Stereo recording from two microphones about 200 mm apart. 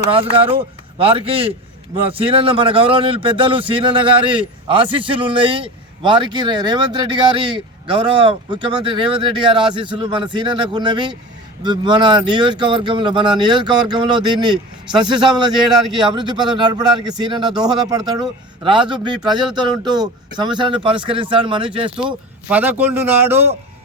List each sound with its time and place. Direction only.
0.1 s a man's voice: 25° right (ahead or behind)
21.9 s speech: 5° right (ahead or behind)